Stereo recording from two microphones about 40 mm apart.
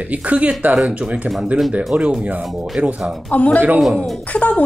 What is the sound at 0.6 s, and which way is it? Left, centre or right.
Speech, right.